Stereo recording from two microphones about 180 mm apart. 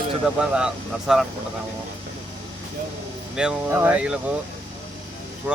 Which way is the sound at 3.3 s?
5° right (ahead or behind).